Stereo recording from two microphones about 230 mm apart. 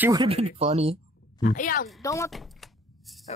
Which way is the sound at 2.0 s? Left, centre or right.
Centre.